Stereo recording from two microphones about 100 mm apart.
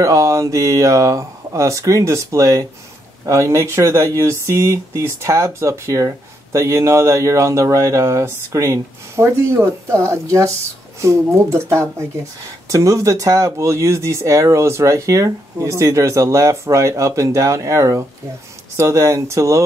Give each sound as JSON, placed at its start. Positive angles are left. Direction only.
{"t": 0.0, "sound": "speech", "side_deg": -35}